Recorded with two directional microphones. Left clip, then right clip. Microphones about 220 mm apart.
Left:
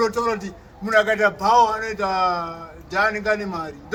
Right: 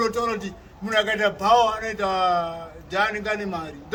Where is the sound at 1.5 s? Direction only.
20° right (ahead or behind).